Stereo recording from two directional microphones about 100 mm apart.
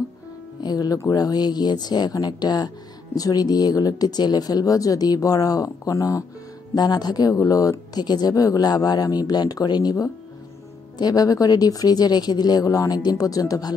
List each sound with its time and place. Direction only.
0.6 s speech: 40° left (ahead or behind)